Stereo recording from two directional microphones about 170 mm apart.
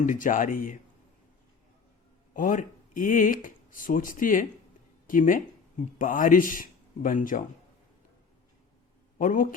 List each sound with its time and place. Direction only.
0.0 s a man's voice: 50° left (ahead or behind)
2.3 s a man's voice: 50° left (ahead or behind)
9.1 s a man's voice: 50° left (ahead or behind)